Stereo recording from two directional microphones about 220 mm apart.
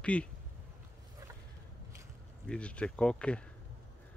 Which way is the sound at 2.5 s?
5° left (ahead or behind).